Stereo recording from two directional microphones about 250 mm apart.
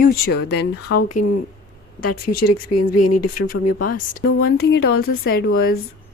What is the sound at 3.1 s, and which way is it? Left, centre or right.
Speech, left.